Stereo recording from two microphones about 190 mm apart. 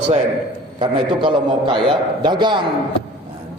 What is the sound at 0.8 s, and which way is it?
A man's voice, 25° right (ahead or behind).